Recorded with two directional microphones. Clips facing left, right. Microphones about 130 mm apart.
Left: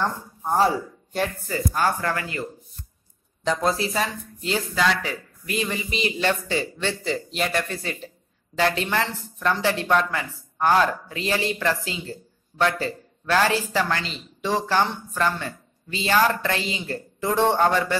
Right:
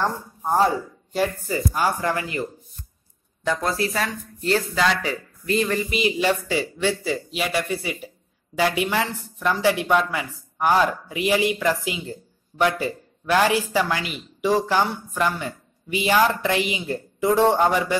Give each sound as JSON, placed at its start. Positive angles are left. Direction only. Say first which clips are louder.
{"t": 0.0, "sound": "speech", "louder": "right 2 dB", "side_deg": -10}
{"t": 3.4, "sound": "speech", "louder": "left 1 dB", "side_deg": 25}
{"t": 5.9, "sound": "speech", "louder": "right 1 dB", "side_deg": -10}